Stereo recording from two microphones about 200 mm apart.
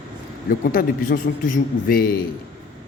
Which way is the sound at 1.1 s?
50° left (ahead or behind).